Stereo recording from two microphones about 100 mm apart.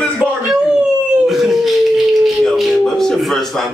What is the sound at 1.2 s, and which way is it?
Howl, centre (ahead or behind).